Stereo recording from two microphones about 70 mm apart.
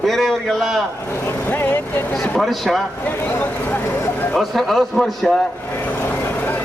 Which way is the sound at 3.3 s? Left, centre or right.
Left.